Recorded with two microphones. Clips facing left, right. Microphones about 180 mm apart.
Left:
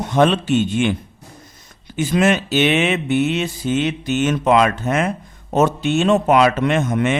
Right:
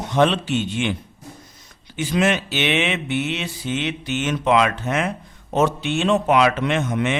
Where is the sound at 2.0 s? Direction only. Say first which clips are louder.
Left 3 dB; 45° left (ahead or behind).